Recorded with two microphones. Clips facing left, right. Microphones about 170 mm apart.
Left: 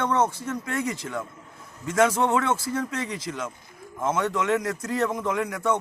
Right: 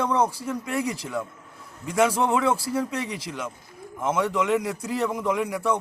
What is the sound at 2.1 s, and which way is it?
Speech, 30° right (ahead or behind).